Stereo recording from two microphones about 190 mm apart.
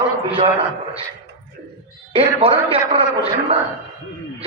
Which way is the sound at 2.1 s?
30° right (ahead or behind).